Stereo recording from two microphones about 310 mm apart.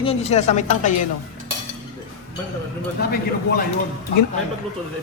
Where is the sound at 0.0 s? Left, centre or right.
Centre.